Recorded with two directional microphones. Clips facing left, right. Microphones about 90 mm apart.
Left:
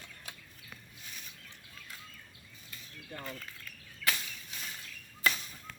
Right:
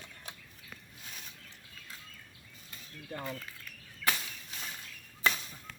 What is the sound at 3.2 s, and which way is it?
Speech, 10° right (ahead or behind).